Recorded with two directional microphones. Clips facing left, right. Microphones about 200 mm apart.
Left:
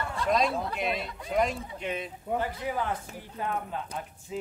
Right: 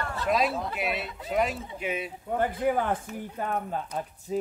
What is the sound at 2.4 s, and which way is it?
Speech, 50° right (ahead or behind).